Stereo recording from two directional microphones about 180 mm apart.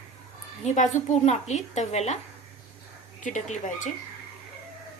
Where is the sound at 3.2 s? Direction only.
45° left (ahead or behind).